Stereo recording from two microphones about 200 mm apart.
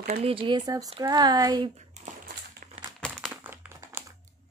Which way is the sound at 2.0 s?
35° right (ahead or behind).